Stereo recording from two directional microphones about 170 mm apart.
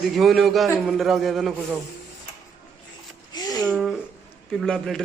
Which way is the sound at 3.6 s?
Centre (ahead or behind).